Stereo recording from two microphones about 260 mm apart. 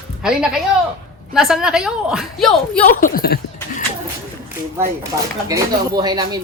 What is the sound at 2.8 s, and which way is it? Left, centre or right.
Speech, left.